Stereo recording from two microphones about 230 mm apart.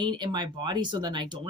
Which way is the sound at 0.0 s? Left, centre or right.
Centre.